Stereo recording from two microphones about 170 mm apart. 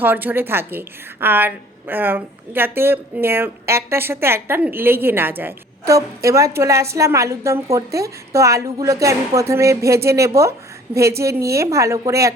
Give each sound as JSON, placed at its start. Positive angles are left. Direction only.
{"t": 0.0, "sound": "a woman's voice", "side_deg": -10}